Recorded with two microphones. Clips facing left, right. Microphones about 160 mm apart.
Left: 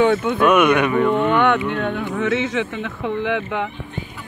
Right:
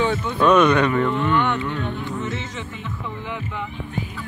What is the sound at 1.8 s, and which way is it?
Speech, 60° left (ahead or behind).